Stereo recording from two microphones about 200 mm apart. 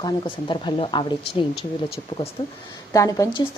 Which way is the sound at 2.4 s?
20° left (ahead or behind).